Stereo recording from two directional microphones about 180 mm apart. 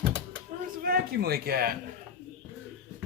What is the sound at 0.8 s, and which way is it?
Speech, 55° right (ahead or behind).